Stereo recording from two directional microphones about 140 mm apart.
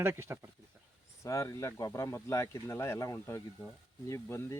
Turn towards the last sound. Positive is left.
turn(degrees=15)  # may be behind; listen again after turning